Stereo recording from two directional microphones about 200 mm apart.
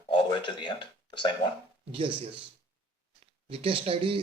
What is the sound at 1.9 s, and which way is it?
Speech, 25° right (ahead or behind).